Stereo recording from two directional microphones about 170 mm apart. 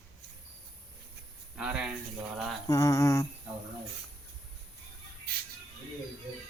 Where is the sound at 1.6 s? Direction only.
5° right (ahead or behind).